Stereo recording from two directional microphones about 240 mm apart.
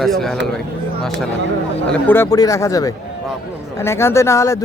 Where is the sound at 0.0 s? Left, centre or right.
Centre.